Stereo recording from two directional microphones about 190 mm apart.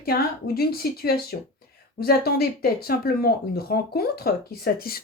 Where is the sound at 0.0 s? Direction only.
50° left (ahead or behind).